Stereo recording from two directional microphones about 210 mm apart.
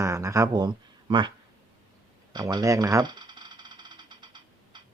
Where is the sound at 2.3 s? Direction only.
20° right (ahead or behind).